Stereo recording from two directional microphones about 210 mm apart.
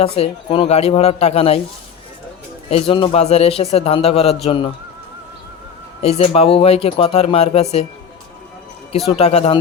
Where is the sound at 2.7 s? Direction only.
25° left (ahead or behind).